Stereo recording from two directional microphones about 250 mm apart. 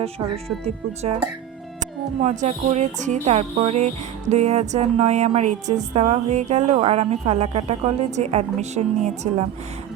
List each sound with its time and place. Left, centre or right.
1.8 s speech: right